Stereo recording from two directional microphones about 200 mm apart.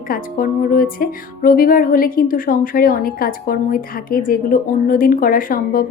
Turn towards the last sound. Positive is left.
turn(degrees=45)  # may be behind; listen again after turning